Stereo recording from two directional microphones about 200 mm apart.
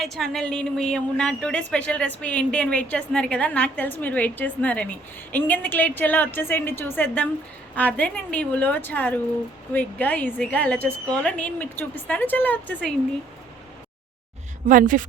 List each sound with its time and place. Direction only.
0.0 s a woman's voice: centre (ahead or behind)
14.7 s a woman's voice: 40° right (ahead or behind)